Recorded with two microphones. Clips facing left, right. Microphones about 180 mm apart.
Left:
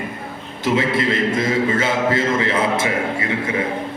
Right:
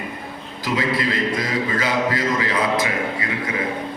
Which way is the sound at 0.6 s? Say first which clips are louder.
Left 4 dB; 25° left (ahead or behind).